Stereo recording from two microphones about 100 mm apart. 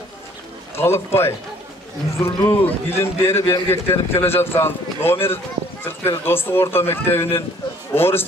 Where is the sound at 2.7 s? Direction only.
25° left (ahead or behind).